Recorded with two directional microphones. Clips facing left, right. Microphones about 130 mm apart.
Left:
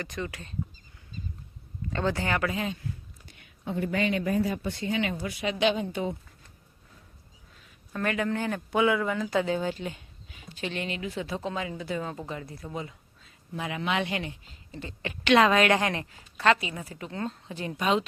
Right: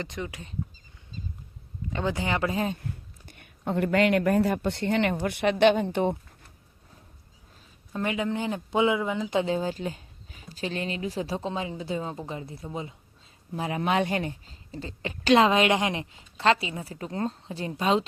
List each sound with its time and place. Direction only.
0.0 s speech: 20° right (ahead or behind)
1.9 s speech: 15° right (ahead or behind)
2.5 s a woman's voice: 35° right (ahead or behind)
2.7 s speech: 50° right (ahead or behind)
7.9 s a woman's voice: 15° right (ahead or behind)